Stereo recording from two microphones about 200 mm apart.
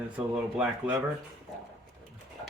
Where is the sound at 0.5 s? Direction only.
5° right (ahead or behind).